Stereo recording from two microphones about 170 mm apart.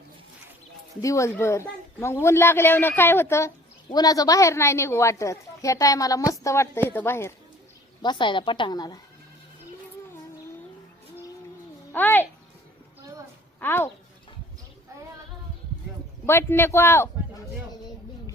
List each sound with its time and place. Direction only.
1.0 s speech: 20° left (ahead or behind)
8.0 s a woman's voice: 25° left (ahead or behind)
11.9 s a child's voice: 10° left (ahead or behind)
13.6 s speech: 15° left (ahead or behind)
16.2 s speech: 15° left (ahead or behind)